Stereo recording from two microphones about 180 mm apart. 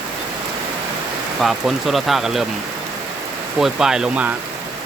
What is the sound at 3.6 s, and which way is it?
Speech, 5° right (ahead or behind).